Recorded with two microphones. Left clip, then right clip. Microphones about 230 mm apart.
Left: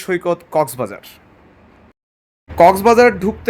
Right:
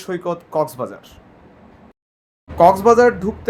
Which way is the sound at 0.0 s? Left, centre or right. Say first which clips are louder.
Left 5 dB; left.